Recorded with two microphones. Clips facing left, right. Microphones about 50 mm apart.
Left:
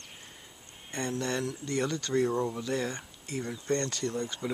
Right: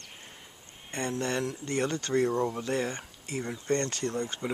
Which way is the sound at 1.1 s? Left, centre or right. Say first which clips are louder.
Right 1 dB; right.